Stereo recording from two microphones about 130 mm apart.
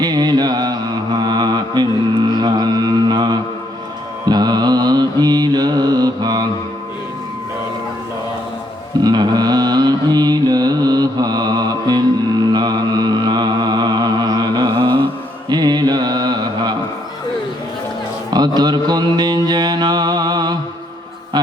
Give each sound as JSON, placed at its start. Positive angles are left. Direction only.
{"t": 0.0, "sound": "mantra", "side_deg": -30}
{"t": 9.0, "sound": "mantra", "side_deg": -35}
{"t": 18.3, "sound": "mantra", "side_deg": -30}